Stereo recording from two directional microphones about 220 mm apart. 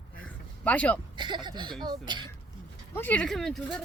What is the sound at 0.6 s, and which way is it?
Speech, 5° left (ahead or behind).